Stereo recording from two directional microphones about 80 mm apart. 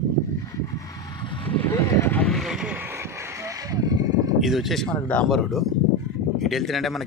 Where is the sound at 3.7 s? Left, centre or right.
Right.